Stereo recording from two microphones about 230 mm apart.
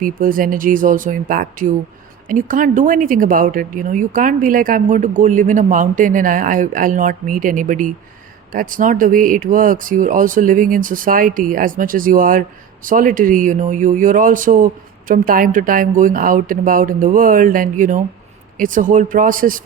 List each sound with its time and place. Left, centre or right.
0.0 s speech: right